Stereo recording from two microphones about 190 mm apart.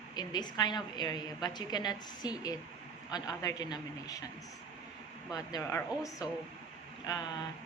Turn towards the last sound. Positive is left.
turn(degrees=20)  # may be behind; listen again after turning